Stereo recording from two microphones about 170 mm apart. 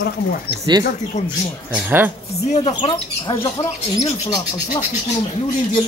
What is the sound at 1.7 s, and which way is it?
Speech, 10° right (ahead or behind).